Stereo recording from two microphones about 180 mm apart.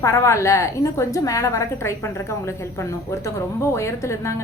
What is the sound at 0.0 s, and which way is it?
A woman's voice, 15° left (ahead or behind).